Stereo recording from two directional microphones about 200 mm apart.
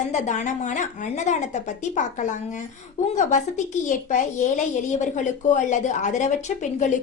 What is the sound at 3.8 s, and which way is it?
A child's voice, 40° left (ahead or behind).